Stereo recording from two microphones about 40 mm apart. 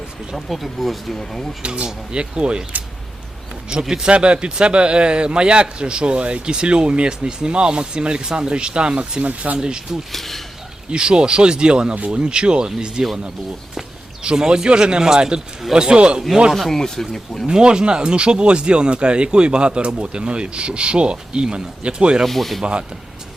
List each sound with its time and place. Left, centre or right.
0.3 s speech: centre
1.6 s speech: right
3.7 s speech: right
10.1 s speech: centre
10.9 s speech: right
11.9 s speech: right
12.2 s speech: right
14.3 s speech: centre
16.6 s speech: centre
17.4 s speech: right
22.2 s speech: centre